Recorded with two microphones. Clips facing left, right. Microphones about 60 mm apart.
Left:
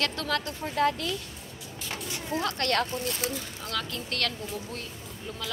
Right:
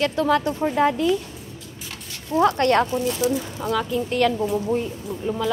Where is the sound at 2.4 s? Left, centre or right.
Right.